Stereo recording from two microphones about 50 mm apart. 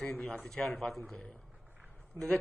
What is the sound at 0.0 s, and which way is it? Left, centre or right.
A man's voice, centre.